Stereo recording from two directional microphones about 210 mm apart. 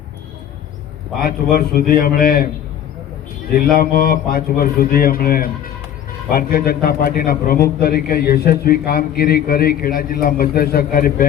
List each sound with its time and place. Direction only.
1.2 s a man's voice: 45° left (ahead or behind)
3.8 s a man's voice: 45° left (ahead or behind)